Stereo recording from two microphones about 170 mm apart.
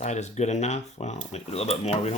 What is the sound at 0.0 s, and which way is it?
Speech, 40° left (ahead or behind).